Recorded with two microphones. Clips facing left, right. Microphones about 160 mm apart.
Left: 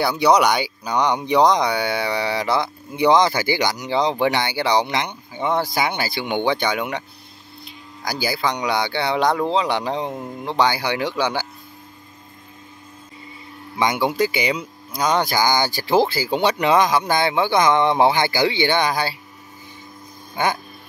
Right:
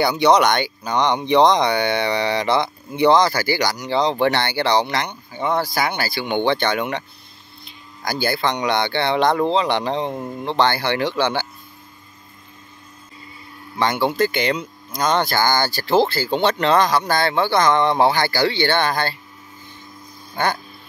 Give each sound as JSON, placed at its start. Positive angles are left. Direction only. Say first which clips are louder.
{"t": 0.0, "sound": "speech", "louder": "right 1 dB", "side_deg": 5}
{"t": 3.1, "sound": "speech", "louder": "even", "side_deg": 20}
{"t": 13.7, "sound": "speech", "louder": "right 1 dB", "side_deg": 10}